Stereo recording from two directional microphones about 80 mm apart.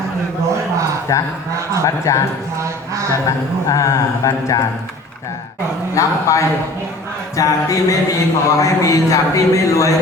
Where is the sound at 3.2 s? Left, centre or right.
Left.